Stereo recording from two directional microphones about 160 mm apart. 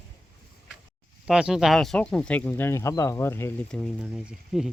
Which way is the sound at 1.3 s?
5° right (ahead or behind).